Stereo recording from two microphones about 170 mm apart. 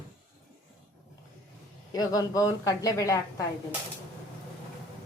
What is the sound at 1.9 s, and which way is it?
A man's voice, 20° left (ahead or behind).